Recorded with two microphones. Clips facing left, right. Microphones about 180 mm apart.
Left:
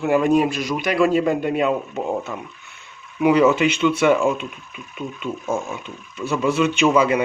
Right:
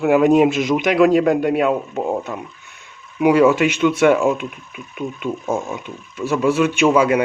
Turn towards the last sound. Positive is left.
turn(degrees=-10)  # may be behind; listen again after turning